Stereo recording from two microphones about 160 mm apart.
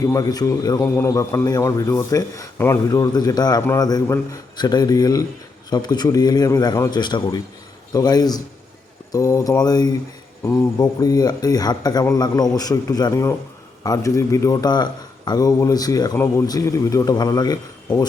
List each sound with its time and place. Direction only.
0.0 s a man's voice: 20° left (ahead or behind)